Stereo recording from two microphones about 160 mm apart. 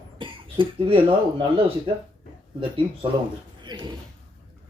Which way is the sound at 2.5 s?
35° right (ahead or behind).